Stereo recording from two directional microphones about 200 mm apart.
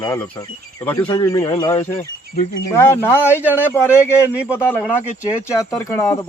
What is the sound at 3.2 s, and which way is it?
Speech, 10° right (ahead or behind).